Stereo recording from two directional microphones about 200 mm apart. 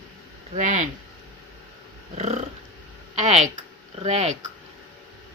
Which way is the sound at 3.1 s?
35° right (ahead or behind).